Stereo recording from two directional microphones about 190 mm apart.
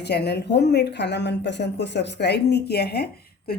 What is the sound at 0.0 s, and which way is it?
Speech, 60° left (ahead or behind).